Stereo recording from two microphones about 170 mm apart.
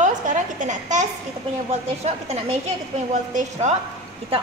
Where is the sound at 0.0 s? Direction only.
50° right (ahead or behind).